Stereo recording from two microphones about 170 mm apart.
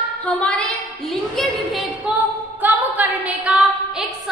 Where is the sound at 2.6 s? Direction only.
10° right (ahead or behind).